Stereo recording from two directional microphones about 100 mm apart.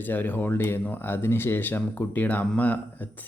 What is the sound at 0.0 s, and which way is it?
Speech, 20° left (ahead or behind).